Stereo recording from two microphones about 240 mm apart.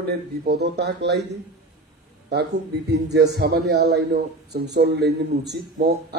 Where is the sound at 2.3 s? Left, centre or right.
Right.